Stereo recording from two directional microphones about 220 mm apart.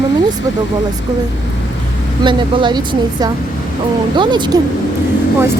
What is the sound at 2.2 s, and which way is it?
Speech, 20° right (ahead or behind).